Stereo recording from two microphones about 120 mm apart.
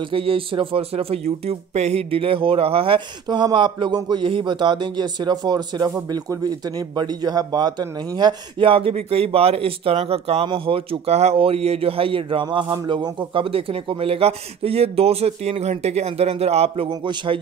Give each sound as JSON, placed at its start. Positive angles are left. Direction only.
{"t": 0.1, "sound": "speech", "side_deg": -50}
{"t": 7.0, "sound": "a man's voice", "side_deg": -35}